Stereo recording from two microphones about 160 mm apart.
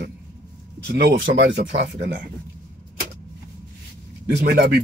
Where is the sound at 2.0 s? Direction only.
70° right (ahead or behind).